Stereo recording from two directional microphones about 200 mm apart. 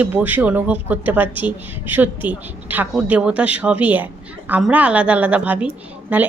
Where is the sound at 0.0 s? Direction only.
10° right (ahead or behind).